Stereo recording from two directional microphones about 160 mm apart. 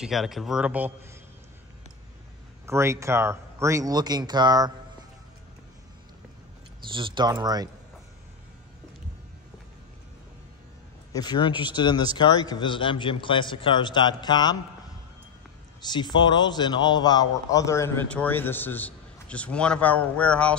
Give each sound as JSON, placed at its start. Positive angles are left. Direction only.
{"t": 0.0, "sound": "speech", "side_deg": 0}
{"t": 2.6, "sound": "speech", "side_deg": -15}
{"t": 6.9, "sound": "speech", "side_deg": -30}
{"t": 11.1, "sound": "a man's voice", "side_deg": 30}
{"t": 15.8, "sound": "a man's voice", "side_deg": 30}
{"t": 18.0, "sound": "a man's voice", "side_deg": 10}